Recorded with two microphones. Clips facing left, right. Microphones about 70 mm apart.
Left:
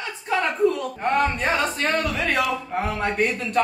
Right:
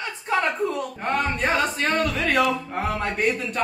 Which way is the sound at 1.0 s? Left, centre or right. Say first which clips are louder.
Left 2 dB; centre.